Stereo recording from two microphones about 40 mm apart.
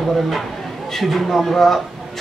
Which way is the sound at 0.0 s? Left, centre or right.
Centre.